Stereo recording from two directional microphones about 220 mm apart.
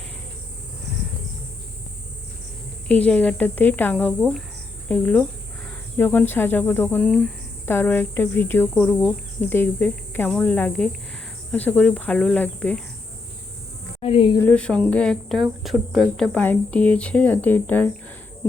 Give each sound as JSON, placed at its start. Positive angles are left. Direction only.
{"t": 2.9, "sound": "speech", "side_deg": 5}
{"t": 14.0, "sound": "speech", "side_deg": 25}
{"t": 14.3, "sound": "speech", "side_deg": 5}